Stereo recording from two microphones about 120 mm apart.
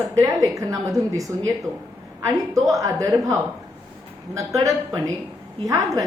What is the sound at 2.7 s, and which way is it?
Speech, 25° right (ahead or behind).